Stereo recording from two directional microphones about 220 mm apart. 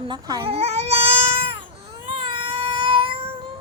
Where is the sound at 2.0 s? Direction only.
25° right (ahead or behind).